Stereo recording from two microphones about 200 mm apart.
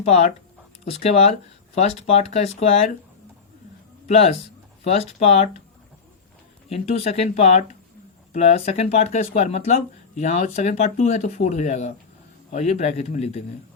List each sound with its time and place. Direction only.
0.0 s speech: 30° left (ahead or behind)
4.1 s speech: 30° left (ahead or behind)
6.7 s speech: 30° left (ahead or behind)